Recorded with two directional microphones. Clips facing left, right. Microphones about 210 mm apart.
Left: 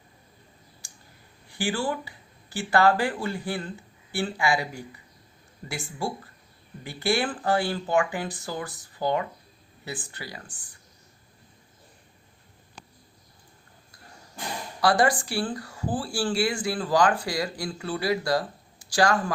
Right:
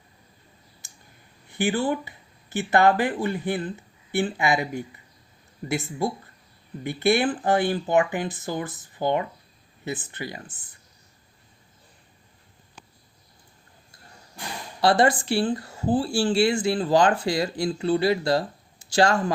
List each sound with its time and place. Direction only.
1.5 s speech: 20° right (ahead or behind)
14.8 s speech: 25° right (ahead or behind)